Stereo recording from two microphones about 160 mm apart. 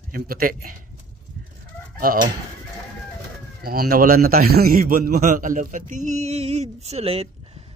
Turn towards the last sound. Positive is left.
turn(degrees=-40)  # may be behind; listen again after turning